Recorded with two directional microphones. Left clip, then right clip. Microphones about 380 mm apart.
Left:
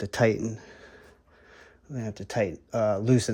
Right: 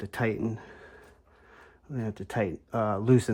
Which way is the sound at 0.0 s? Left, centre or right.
Centre.